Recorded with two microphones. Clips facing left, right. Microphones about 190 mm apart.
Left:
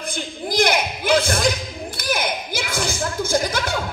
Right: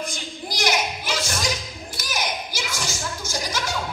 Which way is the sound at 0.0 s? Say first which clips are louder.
Left 4 dB; 55° left (ahead or behind).